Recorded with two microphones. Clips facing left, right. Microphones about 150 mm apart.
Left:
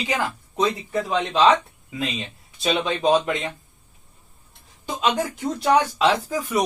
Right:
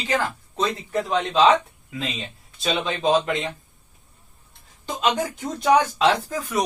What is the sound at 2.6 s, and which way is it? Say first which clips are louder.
Speech: left 2 dB; 10° left (ahead or behind).